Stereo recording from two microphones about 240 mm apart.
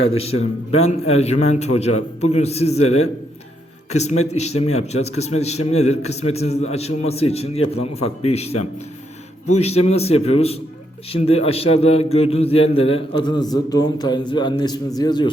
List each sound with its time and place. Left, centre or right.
0.1 s a man's voice: left
0.3 s speech: left
0.9 s a man's voice: left
3.8 s a man's voice: left